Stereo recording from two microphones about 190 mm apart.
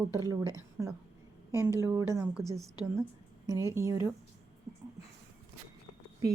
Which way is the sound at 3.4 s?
15° right (ahead or behind).